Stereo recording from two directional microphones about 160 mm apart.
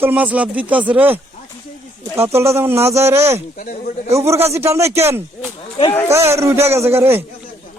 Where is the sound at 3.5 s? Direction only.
55° left (ahead or behind).